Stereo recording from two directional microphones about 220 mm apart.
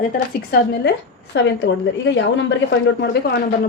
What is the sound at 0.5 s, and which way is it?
A woman's voice, 50° left (ahead or behind).